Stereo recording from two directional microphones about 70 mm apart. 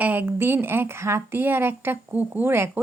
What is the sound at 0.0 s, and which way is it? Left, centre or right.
Speech, right.